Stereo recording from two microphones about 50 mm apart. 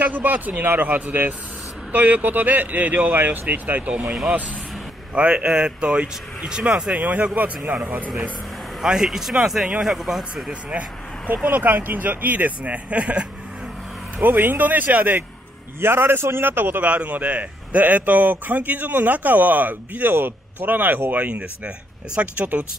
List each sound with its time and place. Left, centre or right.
0.0 s speech: right
5.1 s speech: right
7.0 s speech: right
8.8 s speech: centre
10.7 s a sound: right
11.4 s speech: right
14.1 s speech: right
15.8 s a man's voice: right
16.8 s speech: right